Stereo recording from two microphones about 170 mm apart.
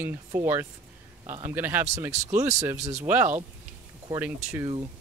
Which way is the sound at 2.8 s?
40° right (ahead or behind).